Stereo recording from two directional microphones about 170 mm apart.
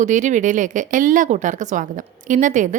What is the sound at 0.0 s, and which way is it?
Speech, 50° right (ahead or behind).